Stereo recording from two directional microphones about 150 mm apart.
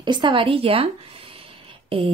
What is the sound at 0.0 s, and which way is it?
Speech, 30° right (ahead or behind).